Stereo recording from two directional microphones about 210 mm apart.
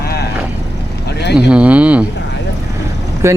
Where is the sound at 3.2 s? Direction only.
15° right (ahead or behind).